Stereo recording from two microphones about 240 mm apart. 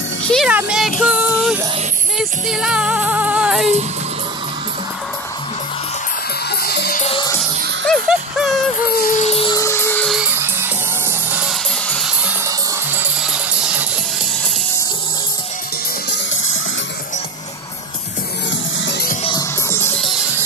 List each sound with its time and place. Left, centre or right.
0.2 s music: centre
6.5 s music: left
7.0 s music: left
7.8 s music: centre
8.8 s music: left; by 13.8 s centre
18.9 s music: left
19.2 s music: centre